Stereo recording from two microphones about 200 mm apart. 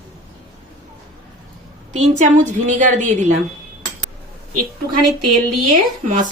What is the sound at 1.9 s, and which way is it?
A woman's voice, 35° right (ahead or behind).